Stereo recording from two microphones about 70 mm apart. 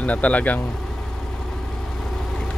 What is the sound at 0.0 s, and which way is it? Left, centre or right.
Speech, left.